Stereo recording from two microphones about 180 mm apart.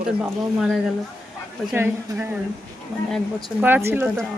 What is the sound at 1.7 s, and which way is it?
Speech, 10° right (ahead or behind).